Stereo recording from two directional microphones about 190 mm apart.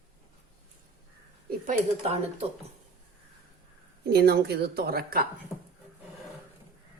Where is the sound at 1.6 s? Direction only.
40° right (ahead or behind).